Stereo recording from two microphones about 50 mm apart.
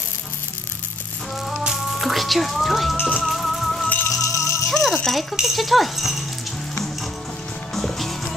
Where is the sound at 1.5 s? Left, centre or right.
Centre.